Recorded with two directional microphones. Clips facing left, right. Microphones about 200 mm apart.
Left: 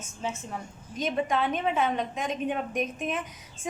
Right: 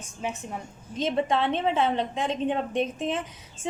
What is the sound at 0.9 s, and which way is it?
A woman's voice, 25° right (ahead or behind).